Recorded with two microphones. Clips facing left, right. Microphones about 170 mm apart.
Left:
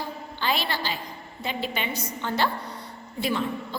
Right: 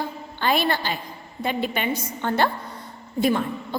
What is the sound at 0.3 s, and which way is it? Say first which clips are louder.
A woman's voice: right 6 dB; 50° right (ahead or behind).